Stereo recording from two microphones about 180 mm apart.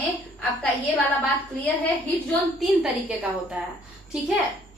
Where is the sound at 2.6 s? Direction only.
5° right (ahead or behind).